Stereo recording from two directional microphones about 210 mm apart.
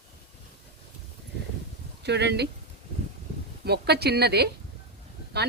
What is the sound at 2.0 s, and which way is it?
Speech, 55° right (ahead or behind).